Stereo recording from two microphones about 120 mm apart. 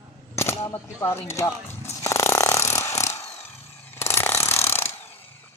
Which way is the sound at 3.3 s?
20° left (ahead or behind).